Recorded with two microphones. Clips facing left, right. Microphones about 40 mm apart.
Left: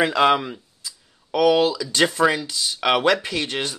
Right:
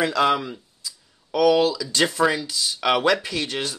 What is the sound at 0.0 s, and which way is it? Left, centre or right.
Speech, left.